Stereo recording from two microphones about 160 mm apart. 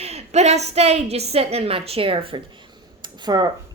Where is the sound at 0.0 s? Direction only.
40° right (ahead or behind).